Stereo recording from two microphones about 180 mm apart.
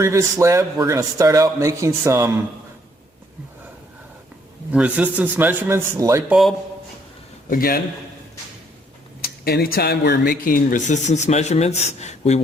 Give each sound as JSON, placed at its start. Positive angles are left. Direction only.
{"t": 0.0, "sound": "a man's voice", "side_deg": -15}
{"t": 4.7, "sound": "a man's voice", "side_deg": -5}
{"t": 7.5, "sound": "a man's voice", "side_deg": 50}
{"t": 9.2, "sound": "speech", "side_deg": 60}